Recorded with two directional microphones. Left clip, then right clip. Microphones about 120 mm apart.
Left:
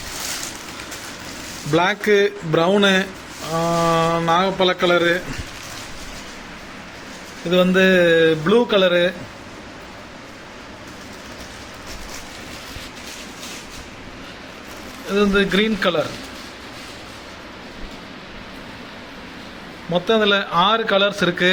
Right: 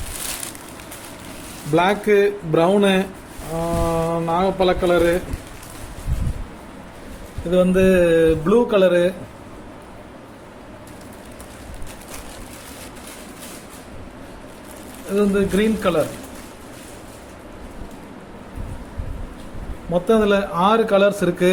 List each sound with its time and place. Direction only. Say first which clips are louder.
1.7 s speech: even; centre (ahead or behind)
3.5 s a sound: left 4 dB; 25° left (ahead or behind)
3.9 s speech: left 3 dB; 10° left (ahead or behind)
7.5 s speech: left 1 dB; 5° right (ahead or behind)
15.1 s a man's voice: left 2 dB; 5° right (ahead or behind)
19.9 s a man's voice: even; 15° right (ahead or behind)